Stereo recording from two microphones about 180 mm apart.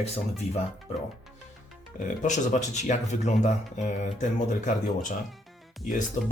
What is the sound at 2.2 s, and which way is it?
Speech, 45° left (ahead or behind).